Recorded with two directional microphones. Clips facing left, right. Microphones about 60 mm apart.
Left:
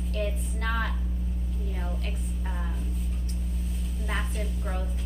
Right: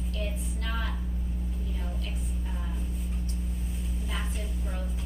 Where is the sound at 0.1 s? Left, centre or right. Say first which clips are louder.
Left 6 dB; left.